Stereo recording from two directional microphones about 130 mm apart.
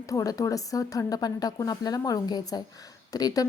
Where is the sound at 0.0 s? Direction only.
25° left (ahead or behind).